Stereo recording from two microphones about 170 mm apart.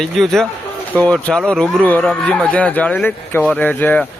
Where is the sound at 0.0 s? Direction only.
Centre (ahead or behind).